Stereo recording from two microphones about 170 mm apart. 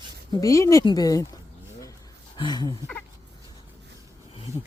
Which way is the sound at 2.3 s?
25° left (ahead or behind).